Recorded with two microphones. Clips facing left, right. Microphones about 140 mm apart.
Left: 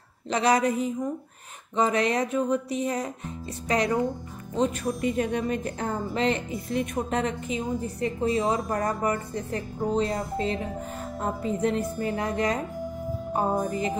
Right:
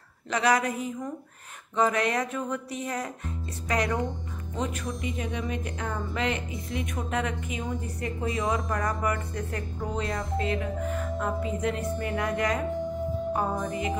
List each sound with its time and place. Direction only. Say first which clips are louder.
0.3 s speech: left 2 dB; 25° left (ahead or behind)
5.0 s speech: left 8 dB; 50° left (ahead or behind); by 13.9 s 35° left (ahead or behind)